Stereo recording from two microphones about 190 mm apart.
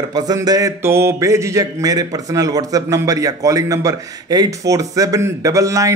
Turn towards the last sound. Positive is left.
turn(degrees=-15)  # may be behind; listen again after turning